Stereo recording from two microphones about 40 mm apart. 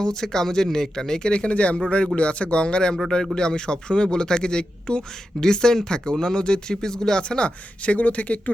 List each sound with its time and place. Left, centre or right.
0.0 s speech: centre; by 8.5 s left